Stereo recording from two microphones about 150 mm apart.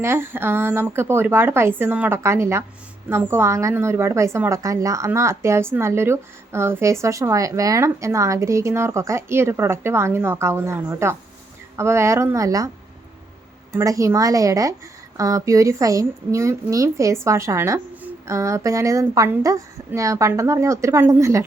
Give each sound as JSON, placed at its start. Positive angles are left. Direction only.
{"t": 0.0, "sound": "a woman's voice", "side_deg": -15}
{"t": 13.7, "sound": "a woman's voice", "side_deg": -20}